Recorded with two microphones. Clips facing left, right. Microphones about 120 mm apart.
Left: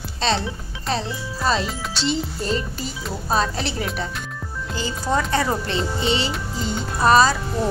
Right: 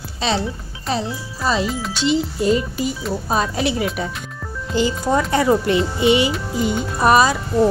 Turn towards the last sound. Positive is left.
turn(degrees=-15)  # may be behind; listen again after turning